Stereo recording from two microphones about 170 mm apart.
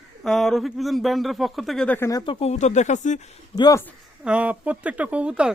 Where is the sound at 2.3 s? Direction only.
35° left (ahead or behind).